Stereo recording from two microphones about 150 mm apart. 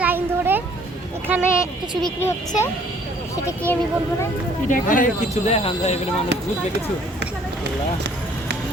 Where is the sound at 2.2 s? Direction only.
15° left (ahead or behind).